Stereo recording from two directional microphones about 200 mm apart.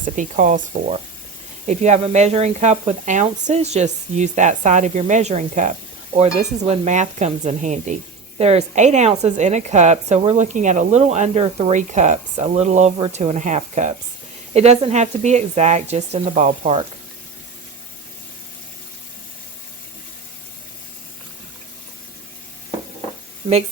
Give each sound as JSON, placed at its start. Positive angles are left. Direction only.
{"t": 0.0, "sound": "a woman's voice", "side_deg": -40}